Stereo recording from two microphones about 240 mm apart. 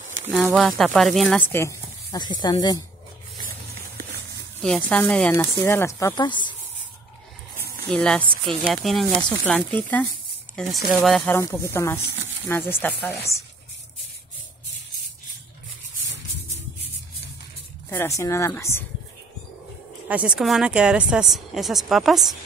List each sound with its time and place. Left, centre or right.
0.3 s a woman's voice: centre
4.6 s speech: centre
7.5 s a sound: right
7.9 s a woman's voice: centre
17.8 s speech: centre
20.1 s a woman's voice: centre